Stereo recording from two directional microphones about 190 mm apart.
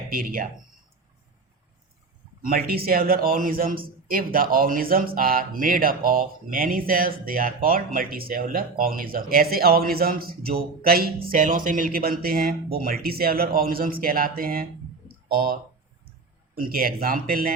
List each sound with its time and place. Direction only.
0.1 s a man's voice: 50° right (ahead or behind)
2.4 s a man's voice: 50° right (ahead or behind)
16.6 s a man's voice: 50° right (ahead or behind)